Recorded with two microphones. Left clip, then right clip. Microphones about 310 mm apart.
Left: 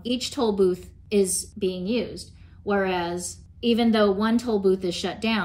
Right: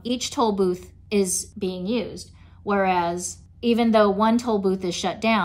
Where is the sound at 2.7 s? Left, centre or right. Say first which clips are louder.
Right 3 dB; centre.